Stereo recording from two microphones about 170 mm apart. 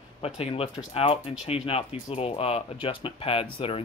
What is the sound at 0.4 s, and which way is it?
Speech, 35° left (ahead or behind).